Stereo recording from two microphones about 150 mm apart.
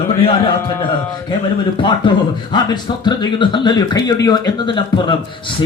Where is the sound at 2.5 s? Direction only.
30° left (ahead or behind).